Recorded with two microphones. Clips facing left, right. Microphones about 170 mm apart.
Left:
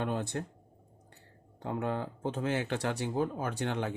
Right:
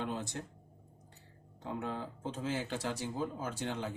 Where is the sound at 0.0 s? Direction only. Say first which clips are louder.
Left 5 dB; 60° left (ahead or behind).